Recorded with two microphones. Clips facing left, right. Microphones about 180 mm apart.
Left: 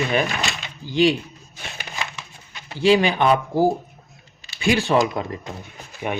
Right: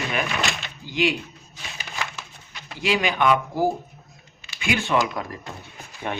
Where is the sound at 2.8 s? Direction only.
30° left (ahead or behind).